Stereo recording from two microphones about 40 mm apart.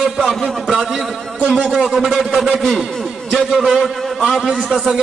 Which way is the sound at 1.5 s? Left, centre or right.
Centre.